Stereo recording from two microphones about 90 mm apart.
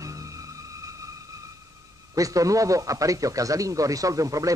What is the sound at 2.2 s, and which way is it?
A man's voice, 40° right (ahead or behind).